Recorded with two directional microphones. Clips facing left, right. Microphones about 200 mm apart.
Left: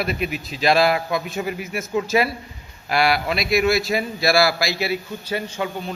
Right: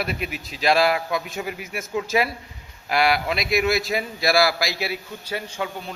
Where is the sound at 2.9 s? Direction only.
15° right (ahead or behind).